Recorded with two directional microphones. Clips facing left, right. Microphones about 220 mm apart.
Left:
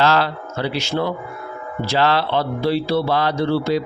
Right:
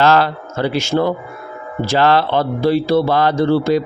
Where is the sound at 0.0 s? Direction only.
50° right (ahead or behind).